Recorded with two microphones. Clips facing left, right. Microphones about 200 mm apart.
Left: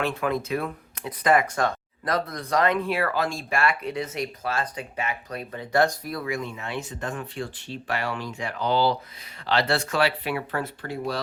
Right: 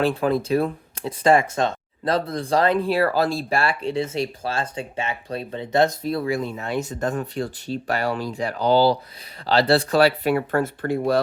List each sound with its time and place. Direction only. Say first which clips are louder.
0.0 s speech: right 5 dB; 30° right (ahead or behind); by 11.2 s 55° right (ahead or behind)